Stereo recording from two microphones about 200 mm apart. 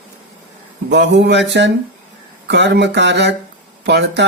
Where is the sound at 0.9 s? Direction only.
55° right (ahead or behind).